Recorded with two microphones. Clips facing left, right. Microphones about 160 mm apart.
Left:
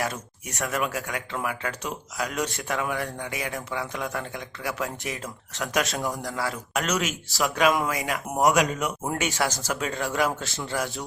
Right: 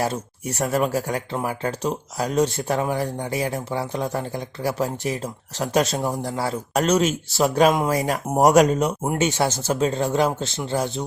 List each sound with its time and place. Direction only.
0.0 s speech: 30° right (ahead or behind)
5.8 s speech: 20° right (ahead or behind); by 8.9 s 40° right (ahead or behind)
8.9 s speech: 25° right (ahead or behind)